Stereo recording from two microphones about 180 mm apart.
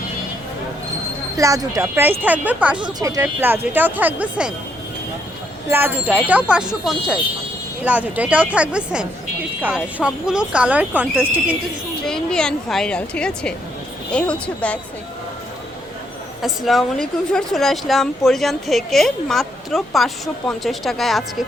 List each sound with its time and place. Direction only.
1.4 s speech: 20° right (ahead or behind)
2.8 s speech: 20° right (ahead or behind)
6.2 s a woman's voice: 5° right (ahead or behind)
12.0 s a woman's voice: 5° left (ahead or behind)
16.4 s a woman's voice: centre (ahead or behind)